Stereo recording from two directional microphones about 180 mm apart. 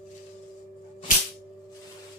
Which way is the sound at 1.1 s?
50° left (ahead or behind).